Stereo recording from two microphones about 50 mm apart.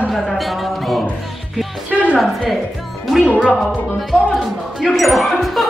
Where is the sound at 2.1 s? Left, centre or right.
Centre.